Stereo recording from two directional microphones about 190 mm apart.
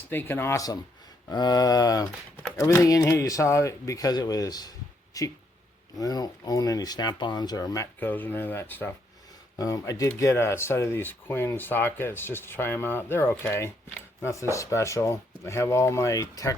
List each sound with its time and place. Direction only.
0.1 s speech: 10° left (ahead or behind)
14.2 s a sound: 15° left (ahead or behind)
14.5 s speech: 15° left (ahead or behind)